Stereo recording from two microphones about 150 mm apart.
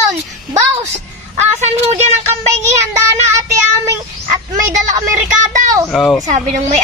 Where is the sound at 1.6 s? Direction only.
50° right (ahead or behind).